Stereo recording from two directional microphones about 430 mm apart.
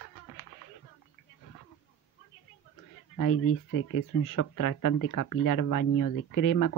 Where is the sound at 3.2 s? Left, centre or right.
Left.